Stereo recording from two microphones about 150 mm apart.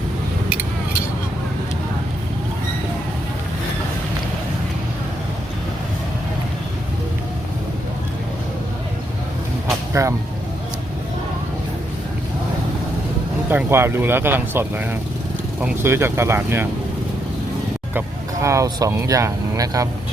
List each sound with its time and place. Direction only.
9.9 s speech: 20° right (ahead or behind)
13.5 s speech: 15° right (ahead or behind)
18.4 s speech: 20° right (ahead or behind)